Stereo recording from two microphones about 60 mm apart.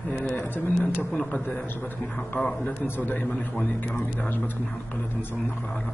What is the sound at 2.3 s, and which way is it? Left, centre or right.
Speech, centre.